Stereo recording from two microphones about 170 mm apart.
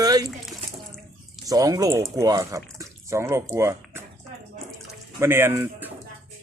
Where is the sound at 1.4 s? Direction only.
20° right (ahead or behind).